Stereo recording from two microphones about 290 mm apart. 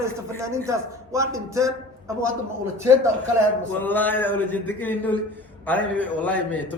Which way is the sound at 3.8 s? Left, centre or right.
Centre.